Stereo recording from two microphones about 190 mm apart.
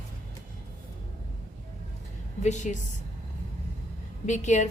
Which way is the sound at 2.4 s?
40° left (ahead or behind).